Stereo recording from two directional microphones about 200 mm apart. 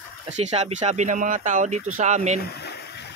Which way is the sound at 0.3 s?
35° right (ahead or behind).